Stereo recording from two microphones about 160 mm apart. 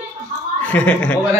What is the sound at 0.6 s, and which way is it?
Speech, 10° left (ahead or behind).